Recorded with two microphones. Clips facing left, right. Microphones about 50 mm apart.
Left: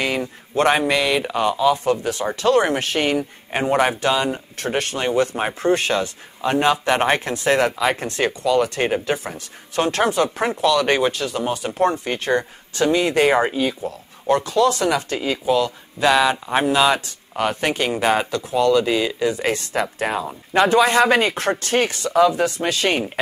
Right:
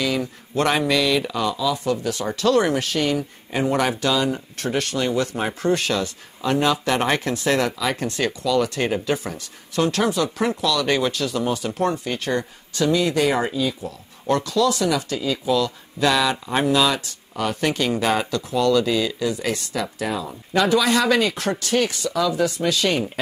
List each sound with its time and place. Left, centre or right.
0.0 s speech: left
14.2 s speech: left
14.6 s speech: left